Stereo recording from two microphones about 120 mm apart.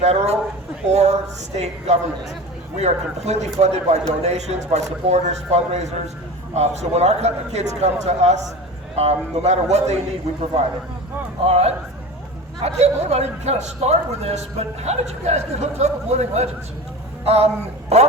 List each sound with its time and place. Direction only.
0.0 s a man's voice: 65° right (ahead or behind)
11.4 s a man's voice: 60° right (ahead or behind)